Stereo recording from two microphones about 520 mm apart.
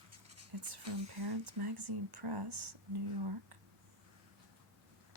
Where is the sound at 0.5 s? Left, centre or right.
Right.